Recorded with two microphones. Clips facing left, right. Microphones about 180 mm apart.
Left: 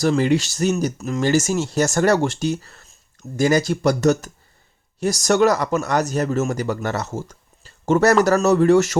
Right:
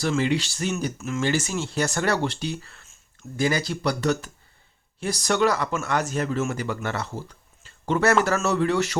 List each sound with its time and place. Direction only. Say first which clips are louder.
0.0 s speech: left 6 dB; 40° left (ahead or behind)